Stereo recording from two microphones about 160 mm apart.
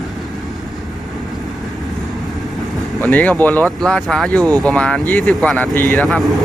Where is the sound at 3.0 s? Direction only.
10° left (ahead or behind).